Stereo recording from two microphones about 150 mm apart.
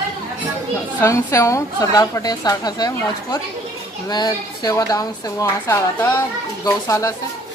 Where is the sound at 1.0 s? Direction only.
20° left (ahead or behind).